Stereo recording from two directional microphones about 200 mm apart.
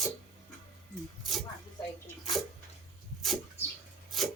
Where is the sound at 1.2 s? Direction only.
Centre (ahead or behind).